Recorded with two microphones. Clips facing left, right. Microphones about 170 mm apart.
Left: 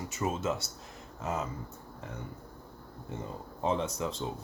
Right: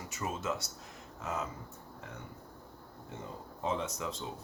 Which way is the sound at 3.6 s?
30° left (ahead or behind).